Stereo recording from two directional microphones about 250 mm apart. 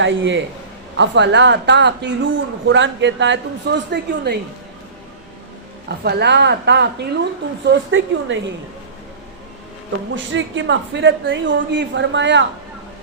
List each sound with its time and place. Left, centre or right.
0.0 s a woman's voice: right
6.0 s a woman's voice: right
10.3 s a woman's voice: right